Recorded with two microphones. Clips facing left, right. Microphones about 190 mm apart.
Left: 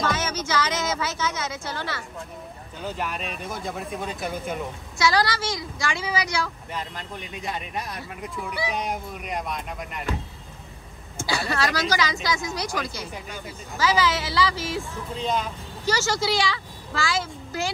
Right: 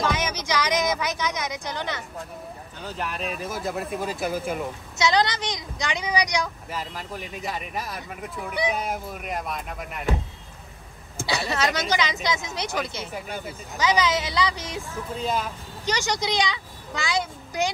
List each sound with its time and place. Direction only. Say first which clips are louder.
0.0 s a woman's voice: even; 15° right (ahead or behind)
2.8 s speech: left 1 dB; centre (ahead or behind)
4.9 s a woman's voice: even; 20° right (ahead or behind)
6.7 s speech: right 1 dB; 5° right (ahead or behind)
11.2 s a woman's voice: even; 20° right (ahead or behind)
13.7 s speech: even; 20° right (ahead or behind)
14.8 s speech: even; 5° right (ahead or behind)
15.8 s a child's voice: left 2 dB; 15° right (ahead or behind)